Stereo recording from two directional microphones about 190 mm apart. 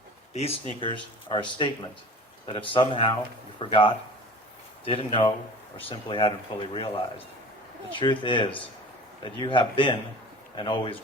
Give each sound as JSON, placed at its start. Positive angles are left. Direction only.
{"t": 0.3, "sound": "speech", "side_deg": 30}